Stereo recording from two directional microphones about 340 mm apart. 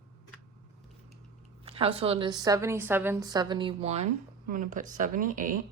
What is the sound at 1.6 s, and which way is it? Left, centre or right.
A woman's voice, centre.